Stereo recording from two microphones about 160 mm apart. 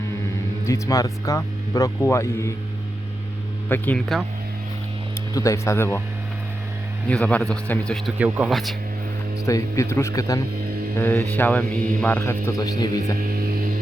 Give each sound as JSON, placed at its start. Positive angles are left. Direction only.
{"t": 0.6, "sound": "speech", "side_deg": 20}
{"t": 3.7, "sound": "speech", "side_deg": 10}
{"t": 5.3, "sound": "speech", "side_deg": 20}
{"t": 7.1, "sound": "speech", "side_deg": 5}
{"t": 9.5, "sound": "speech", "side_deg": 20}
{"t": 13.1, "sound": "hum", "side_deg": -65}